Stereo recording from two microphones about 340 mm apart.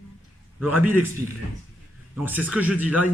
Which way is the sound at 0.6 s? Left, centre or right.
Centre.